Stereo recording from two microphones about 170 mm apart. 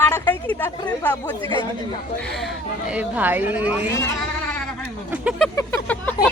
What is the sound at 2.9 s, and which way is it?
Speech, 10° right (ahead or behind).